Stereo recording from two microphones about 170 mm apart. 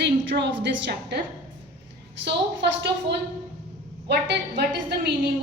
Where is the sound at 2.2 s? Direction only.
90° right.